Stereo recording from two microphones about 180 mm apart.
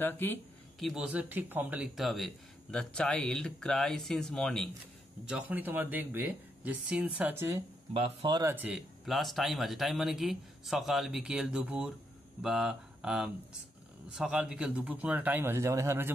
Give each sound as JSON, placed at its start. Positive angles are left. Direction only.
{"t": 0.0, "sound": "speech", "side_deg": 10}
{"t": 0.7, "sound": "speech", "side_deg": 0}
{"t": 5.3, "sound": "speech", "side_deg": -10}
{"t": 7.9, "sound": "speech", "side_deg": -30}
{"t": 8.5, "sound": "speech", "side_deg": -10}